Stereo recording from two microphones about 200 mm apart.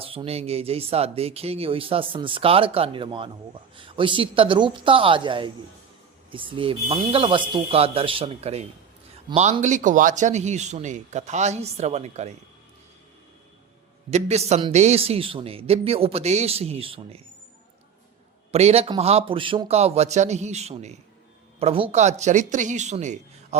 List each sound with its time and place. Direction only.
0.0 s speech: 25° right (ahead or behind)
14.1 s speech: 35° right (ahead or behind)
18.5 s speech: 30° right (ahead or behind)